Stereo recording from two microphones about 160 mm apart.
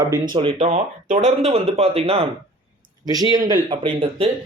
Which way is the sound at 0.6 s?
45° right (ahead or behind).